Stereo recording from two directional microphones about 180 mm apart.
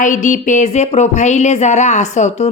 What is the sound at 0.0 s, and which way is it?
A woman's voice, 45° left (ahead or behind).